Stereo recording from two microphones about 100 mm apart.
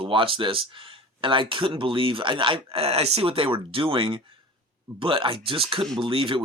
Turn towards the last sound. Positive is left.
turn(degrees=-60)  # may be behind; listen again after turning